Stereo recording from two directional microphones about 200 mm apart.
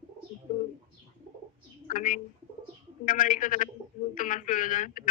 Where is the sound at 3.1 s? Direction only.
40° left (ahead or behind).